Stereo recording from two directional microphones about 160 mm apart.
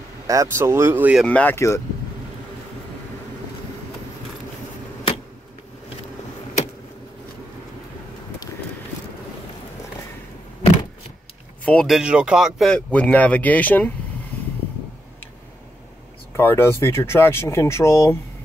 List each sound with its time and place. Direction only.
0.3 s speech: 20° right (ahead or behind)
1.2 s speech: 10° left (ahead or behind)
11.6 s speech: 5° left (ahead or behind)
16.3 s speech: 15° left (ahead or behind)